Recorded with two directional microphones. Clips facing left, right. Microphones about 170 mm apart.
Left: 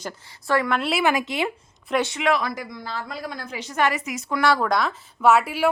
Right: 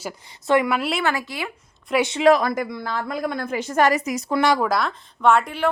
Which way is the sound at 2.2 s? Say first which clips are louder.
Right 7 dB; 45° right (ahead or behind).